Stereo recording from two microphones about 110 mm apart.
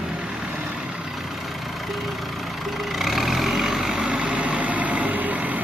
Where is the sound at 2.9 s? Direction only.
Centre (ahead or behind).